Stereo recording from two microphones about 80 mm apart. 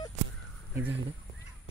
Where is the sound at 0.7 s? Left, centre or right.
Right.